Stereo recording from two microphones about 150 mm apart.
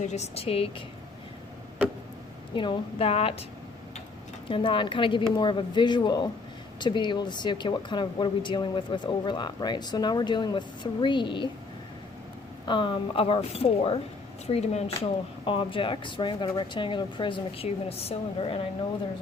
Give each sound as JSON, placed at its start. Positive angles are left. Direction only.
{"t": 0.0, "sound": "speech", "side_deg": 50}
{"t": 2.6, "sound": "speech", "side_deg": 35}
{"t": 4.4, "sound": "speech", "side_deg": 35}
{"t": 12.6, "sound": "speech", "side_deg": 35}
{"t": 15.4, "sound": "speech", "side_deg": 35}